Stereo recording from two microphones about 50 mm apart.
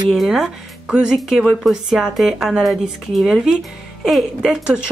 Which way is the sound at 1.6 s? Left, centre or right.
Centre.